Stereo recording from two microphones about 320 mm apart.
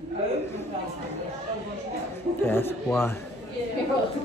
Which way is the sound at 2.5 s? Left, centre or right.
Centre.